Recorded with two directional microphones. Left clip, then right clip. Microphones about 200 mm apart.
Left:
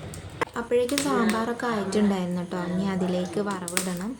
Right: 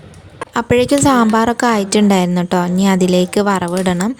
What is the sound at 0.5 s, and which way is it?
A woman's voice, 55° right (ahead or behind).